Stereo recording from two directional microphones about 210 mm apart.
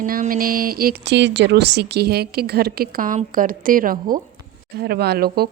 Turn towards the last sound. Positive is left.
turn(degrees=-50)  # may be behind; listen again after turning